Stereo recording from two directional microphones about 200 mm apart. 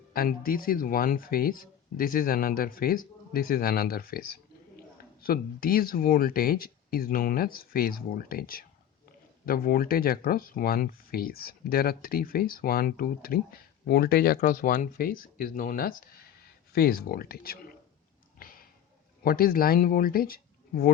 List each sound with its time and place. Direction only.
0.1 s speech: 45° left (ahead or behind)
18.3 s a sound: 45° left (ahead or behind)
19.2 s speech: 45° left (ahead or behind)